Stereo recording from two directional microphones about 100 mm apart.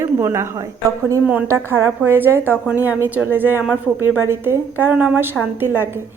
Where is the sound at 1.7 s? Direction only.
20° right (ahead or behind).